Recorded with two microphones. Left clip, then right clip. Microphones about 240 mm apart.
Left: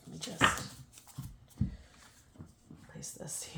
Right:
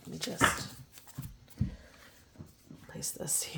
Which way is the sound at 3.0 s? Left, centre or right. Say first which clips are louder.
Right 7 dB; right.